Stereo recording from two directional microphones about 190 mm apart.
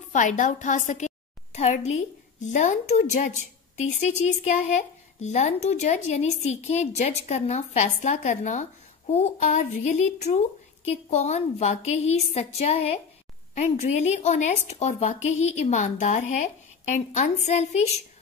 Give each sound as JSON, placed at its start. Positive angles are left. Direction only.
{"t": 0.1, "sound": "a woman's voice", "side_deg": 40}